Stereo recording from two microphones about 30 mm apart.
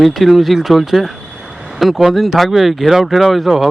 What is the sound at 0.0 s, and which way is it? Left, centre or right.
Speech, centre.